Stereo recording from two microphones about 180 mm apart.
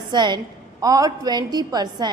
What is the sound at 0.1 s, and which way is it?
A woman's voice, 25° right (ahead or behind).